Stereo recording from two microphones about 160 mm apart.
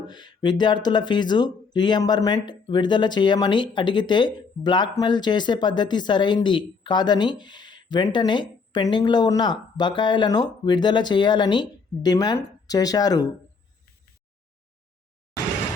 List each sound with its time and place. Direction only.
0.1 s speech: 30° left (ahead or behind)